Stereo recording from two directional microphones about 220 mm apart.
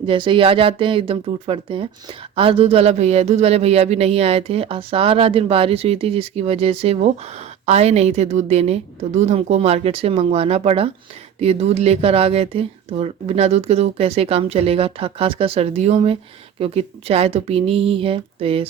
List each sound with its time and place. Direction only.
0.0 s speech: 25° right (ahead or behind)